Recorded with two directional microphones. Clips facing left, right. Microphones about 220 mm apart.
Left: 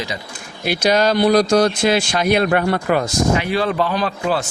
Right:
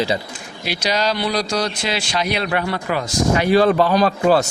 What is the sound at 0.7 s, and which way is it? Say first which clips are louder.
Speech: left 5 dB; 50° left (ahead or behind).